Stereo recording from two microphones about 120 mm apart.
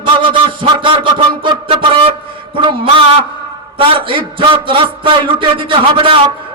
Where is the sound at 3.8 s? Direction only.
45° right (ahead or behind).